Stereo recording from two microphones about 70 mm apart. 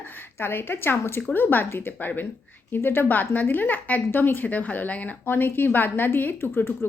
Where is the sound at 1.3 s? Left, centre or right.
Left.